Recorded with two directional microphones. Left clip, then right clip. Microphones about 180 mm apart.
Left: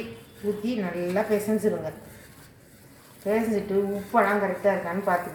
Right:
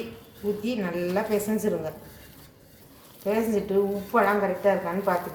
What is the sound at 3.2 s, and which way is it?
Speech, 10° right (ahead or behind).